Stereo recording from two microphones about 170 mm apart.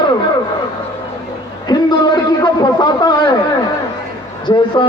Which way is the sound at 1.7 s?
25° left (ahead or behind).